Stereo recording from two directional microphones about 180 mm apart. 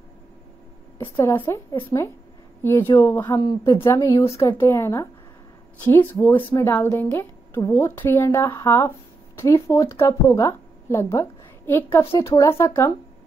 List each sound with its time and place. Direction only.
1.2 s a woman's voice: 15° left (ahead or behind)